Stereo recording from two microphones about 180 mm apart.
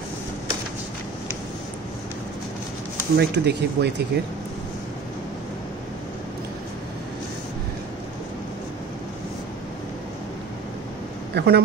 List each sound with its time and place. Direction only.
3.2 s speech: 65° right (ahead or behind)
11.3 s speech: 65° right (ahead or behind)